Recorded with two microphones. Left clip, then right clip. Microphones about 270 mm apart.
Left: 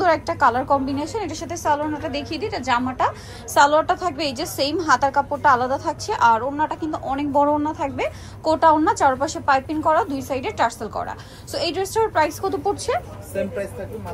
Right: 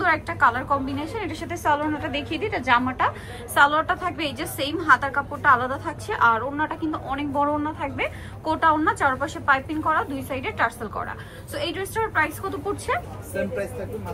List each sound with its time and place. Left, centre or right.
0.0 s a woman's voice: centre